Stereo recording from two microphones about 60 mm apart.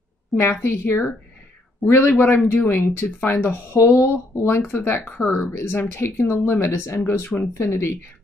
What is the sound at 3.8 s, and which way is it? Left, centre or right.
Speech, left.